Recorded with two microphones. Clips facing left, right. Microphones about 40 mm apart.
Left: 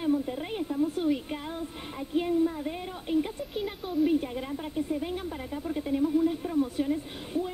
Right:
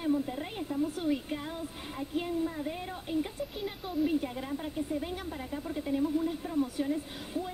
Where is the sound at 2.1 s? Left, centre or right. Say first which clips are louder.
Left 7 dB; centre.